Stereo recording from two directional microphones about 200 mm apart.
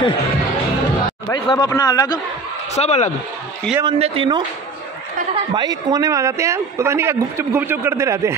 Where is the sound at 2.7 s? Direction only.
35° left (ahead or behind).